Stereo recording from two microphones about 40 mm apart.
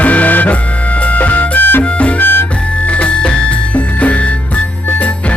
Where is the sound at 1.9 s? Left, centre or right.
Left.